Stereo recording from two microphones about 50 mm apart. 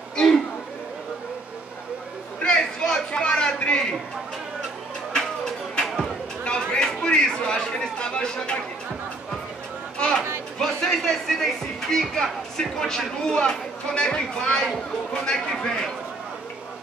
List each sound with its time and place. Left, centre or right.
2.4 s a sound: centre
5.1 s music: centre
5.9 s a sound: centre
6.4 s chatter: centre
9.9 s chatter: centre
10.6 s speech: centre